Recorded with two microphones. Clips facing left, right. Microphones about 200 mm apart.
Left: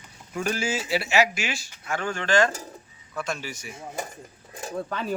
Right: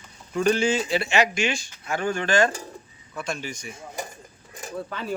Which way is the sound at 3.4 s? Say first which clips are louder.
Right 2 dB; 5° left (ahead or behind).